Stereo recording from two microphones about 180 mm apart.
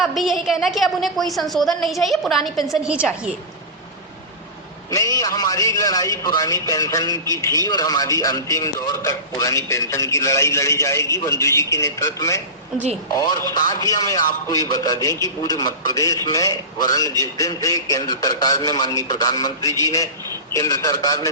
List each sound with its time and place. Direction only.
0.0 s a woman's voice: centre (ahead or behind)
4.9 s a man's voice: 20° left (ahead or behind)
13.5 s a man's voice: 20° left (ahead or behind)